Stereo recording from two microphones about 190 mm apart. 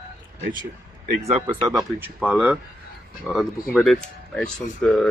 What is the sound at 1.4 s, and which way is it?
Speech, 20° right (ahead or behind).